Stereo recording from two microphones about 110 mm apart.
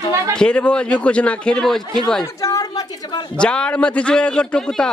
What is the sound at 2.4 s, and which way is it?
Speech, 30° left (ahead or behind).